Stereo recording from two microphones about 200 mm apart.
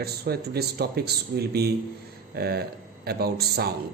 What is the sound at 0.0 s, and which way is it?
Speech, 50° right (ahead or behind).